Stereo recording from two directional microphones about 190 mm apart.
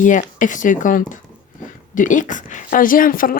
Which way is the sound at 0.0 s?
40° left (ahead or behind).